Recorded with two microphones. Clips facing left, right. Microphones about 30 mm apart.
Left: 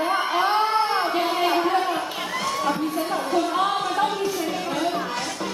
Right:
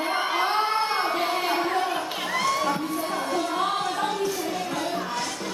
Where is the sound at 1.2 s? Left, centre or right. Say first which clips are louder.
Left 3 dB; centre.